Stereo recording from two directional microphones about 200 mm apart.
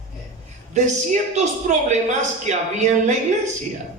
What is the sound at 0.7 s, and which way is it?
A man's voice, 35° right (ahead or behind).